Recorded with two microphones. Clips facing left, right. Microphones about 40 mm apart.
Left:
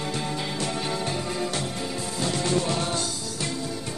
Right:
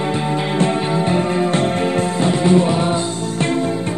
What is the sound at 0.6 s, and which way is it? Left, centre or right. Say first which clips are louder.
Music: right 13 dB; right.